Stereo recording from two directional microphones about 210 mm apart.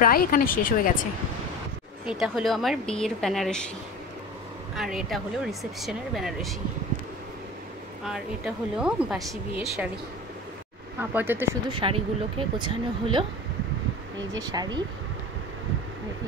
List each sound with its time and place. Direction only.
0.0 s speech: 45° left (ahead or behind)
2.0 s speech: 5° right (ahead or behind)
4.7 s speech: centre (ahead or behind)
8.0 s a woman's voice: 5° right (ahead or behind)
11.0 s a woman's voice: 10° right (ahead or behind)
11.7 s speech: 25° right (ahead or behind)
14.3 s speech: 20° right (ahead or behind)